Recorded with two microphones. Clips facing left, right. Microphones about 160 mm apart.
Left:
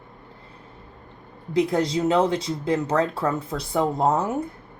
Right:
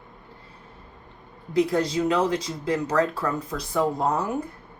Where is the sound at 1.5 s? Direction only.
25° left (ahead or behind).